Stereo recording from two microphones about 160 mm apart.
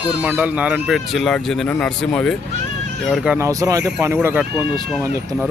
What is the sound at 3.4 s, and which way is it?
Speech, 20° right (ahead or behind).